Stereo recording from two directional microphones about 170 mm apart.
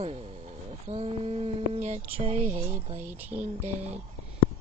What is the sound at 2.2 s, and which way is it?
Speech, 35° right (ahead or behind).